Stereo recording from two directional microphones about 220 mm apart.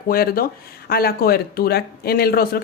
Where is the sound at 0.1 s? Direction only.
45° left (ahead or behind).